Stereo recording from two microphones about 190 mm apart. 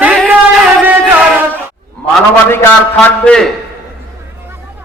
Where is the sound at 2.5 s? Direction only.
10° left (ahead or behind).